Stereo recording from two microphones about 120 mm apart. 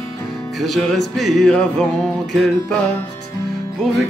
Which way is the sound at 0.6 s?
Centre (ahead or behind).